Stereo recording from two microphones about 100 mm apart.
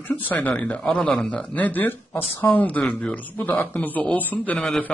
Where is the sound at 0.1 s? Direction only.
15° left (ahead or behind).